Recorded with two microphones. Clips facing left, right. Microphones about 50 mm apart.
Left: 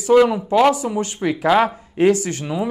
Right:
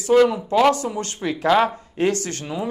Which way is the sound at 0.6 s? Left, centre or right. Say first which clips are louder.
Left 2 dB; centre.